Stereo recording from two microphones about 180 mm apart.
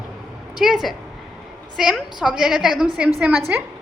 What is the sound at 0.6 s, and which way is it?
A woman's voice, centre (ahead or behind).